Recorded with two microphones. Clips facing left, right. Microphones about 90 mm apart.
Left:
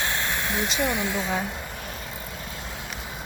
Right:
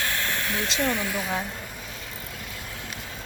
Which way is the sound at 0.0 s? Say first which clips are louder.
Left 1 dB; 20° left (ahead or behind).